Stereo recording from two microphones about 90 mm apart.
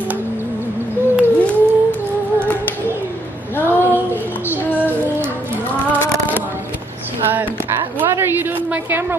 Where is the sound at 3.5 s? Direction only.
20° left (ahead or behind).